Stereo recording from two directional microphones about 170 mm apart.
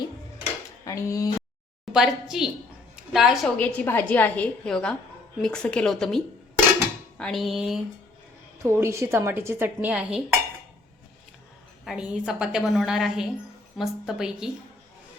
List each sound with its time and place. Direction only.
0.9 s speech: 20° left (ahead or behind)
1.9 s a woman's voice: 5° right (ahead or behind)
8.6 s speech: 15° right (ahead or behind)
11.9 s a woman's voice: 5° right (ahead or behind)